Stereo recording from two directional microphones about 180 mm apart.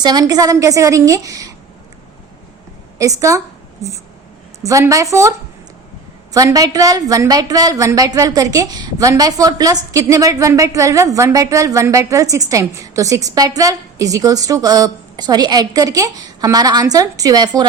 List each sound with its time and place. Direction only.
0.0 s a woman's voice: 20° right (ahead or behind)
3.0 s a woman's voice: 15° right (ahead or behind)
4.6 s a woman's voice: 15° right (ahead or behind)
6.3 s a woman's voice: 20° right (ahead or behind)